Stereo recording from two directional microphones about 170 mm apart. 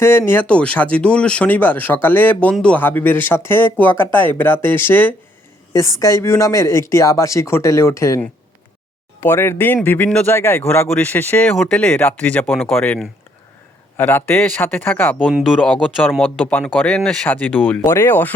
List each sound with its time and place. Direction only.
0.0 s speech: 15° left (ahead or behind)
15.2 s speech: 5° right (ahead or behind)